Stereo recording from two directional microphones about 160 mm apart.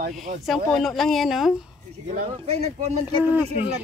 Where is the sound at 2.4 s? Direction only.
40° right (ahead or behind).